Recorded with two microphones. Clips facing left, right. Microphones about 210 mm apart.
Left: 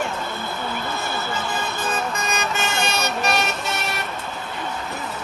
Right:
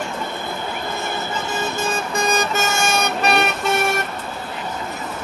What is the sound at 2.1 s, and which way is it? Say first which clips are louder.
Vehicle: right 5 dB; 35° right (ahead or behind).